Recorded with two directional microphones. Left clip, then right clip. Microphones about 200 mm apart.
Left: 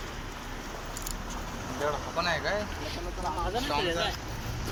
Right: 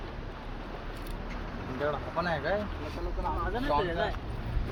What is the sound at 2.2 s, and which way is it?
Speech, 45° right (ahead or behind).